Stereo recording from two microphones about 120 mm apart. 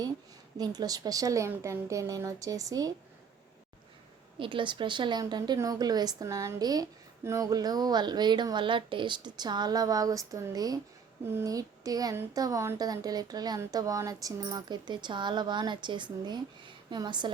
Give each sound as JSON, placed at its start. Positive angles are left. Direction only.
{"t": 0.6, "sound": "speech", "side_deg": -35}
{"t": 4.4, "sound": "speech", "side_deg": -45}